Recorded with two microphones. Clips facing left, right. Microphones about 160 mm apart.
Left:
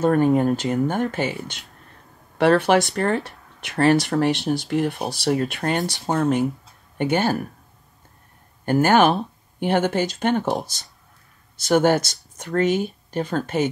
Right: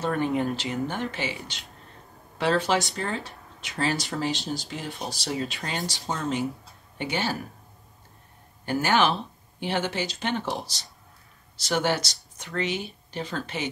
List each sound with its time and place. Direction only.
0.0 s speech: 45° left (ahead or behind)
2.3 s speech: 60° left (ahead or behind)
8.6 s speech: 50° left (ahead or behind)